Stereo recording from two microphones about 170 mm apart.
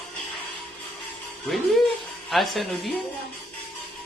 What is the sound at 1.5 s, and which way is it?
A woman's voice, centre (ahead or behind).